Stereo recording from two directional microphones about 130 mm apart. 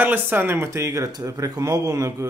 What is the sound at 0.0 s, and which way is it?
Speech, 15° right (ahead or behind).